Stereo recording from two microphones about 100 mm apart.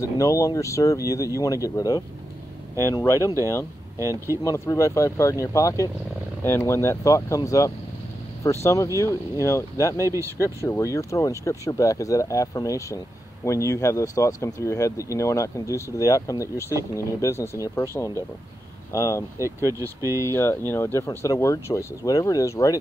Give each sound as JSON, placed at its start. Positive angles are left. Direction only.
{"t": 0.0, "sound": "speech", "side_deg": 35}
{"t": 4.0, "sound": "speech", "side_deg": -30}
{"t": 4.5, "sound": "speech", "side_deg": 30}
{"t": 9.9, "sound": "speech", "side_deg": -30}
{"t": 10.4, "sound": "speech", "side_deg": 30}
{"t": 18.9, "sound": "speech", "side_deg": 30}
{"t": 19.4, "sound": "speech", "side_deg": -30}
{"t": 20.2, "sound": "speech", "side_deg": 25}